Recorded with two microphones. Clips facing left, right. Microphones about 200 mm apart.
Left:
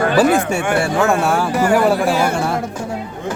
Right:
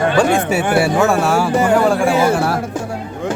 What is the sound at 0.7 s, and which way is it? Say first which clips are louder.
Speech: right 2 dB; 5° right (ahead or behind).